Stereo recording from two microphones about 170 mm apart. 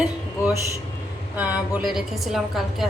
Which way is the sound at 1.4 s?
10° right (ahead or behind).